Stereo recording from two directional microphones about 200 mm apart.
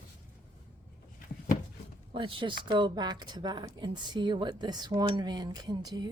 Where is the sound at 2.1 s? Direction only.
25° right (ahead or behind).